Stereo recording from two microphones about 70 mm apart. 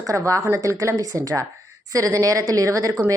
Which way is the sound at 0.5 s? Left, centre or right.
Right.